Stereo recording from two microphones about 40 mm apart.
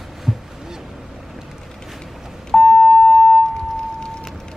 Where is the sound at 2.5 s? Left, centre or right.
Centre.